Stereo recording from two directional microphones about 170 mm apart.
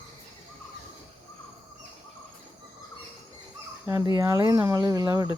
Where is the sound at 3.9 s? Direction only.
25° right (ahead or behind).